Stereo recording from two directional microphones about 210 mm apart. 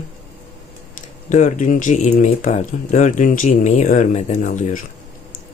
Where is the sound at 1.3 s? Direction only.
35° left (ahead or behind).